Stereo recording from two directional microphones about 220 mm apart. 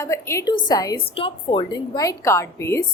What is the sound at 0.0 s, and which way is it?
A woman's voice, 15° left (ahead or behind).